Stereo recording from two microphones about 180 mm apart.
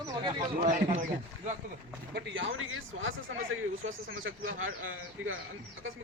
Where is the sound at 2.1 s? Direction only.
80° right.